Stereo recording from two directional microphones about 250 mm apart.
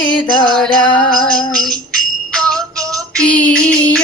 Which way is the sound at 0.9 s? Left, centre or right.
Centre.